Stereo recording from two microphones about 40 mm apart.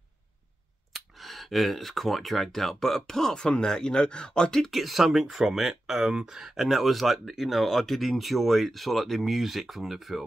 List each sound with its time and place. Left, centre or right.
0.9 s speech: centre
4.6 s speech: centre